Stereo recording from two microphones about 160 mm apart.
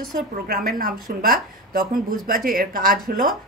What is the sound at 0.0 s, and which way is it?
A woman's voice, 65° right (ahead or behind).